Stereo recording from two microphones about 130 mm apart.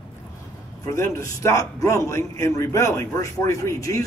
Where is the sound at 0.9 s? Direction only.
25° left (ahead or behind).